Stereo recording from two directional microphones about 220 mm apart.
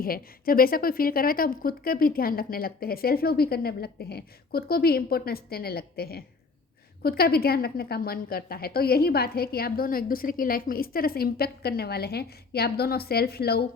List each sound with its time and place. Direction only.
0.0 s a woman's voice: 40° left (ahead or behind)